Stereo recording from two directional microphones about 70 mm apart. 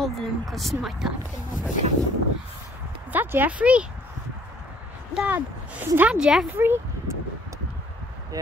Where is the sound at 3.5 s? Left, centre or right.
Centre.